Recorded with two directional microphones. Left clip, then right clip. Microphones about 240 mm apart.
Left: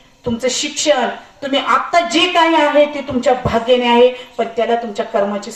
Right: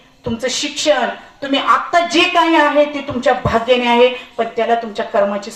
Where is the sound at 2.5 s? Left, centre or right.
Right.